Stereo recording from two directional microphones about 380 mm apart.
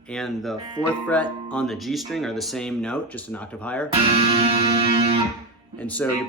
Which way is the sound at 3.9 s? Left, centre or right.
Centre.